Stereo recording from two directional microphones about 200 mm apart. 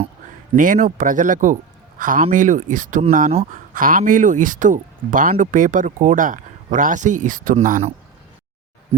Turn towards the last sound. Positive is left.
turn(degrees=-40)  # may be behind; listen again after turning